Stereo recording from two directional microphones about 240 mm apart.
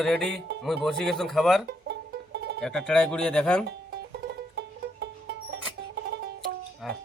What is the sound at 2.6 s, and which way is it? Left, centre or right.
Speech, centre.